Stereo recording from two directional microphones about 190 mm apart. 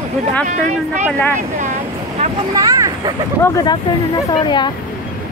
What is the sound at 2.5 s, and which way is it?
Vehicle, 20° right (ahead or behind).